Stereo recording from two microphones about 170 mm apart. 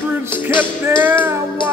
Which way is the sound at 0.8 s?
15° right (ahead or behind).